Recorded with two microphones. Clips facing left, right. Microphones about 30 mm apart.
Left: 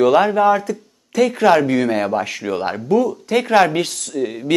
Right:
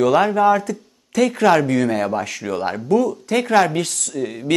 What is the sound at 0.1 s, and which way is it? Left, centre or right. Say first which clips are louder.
Speech: left 1 dB; centre.